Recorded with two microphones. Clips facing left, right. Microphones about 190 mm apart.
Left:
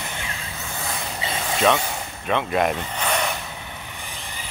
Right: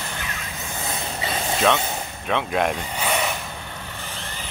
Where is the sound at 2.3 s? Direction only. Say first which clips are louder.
Left 1 dB; centre (ahead or behind).